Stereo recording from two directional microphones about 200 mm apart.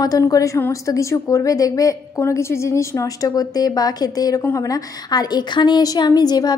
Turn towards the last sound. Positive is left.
turn(degrees=20)  # may be behind; listen again after turning